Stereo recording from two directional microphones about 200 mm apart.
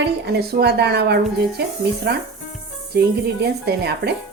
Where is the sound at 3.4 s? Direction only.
55° right (ahead or behind).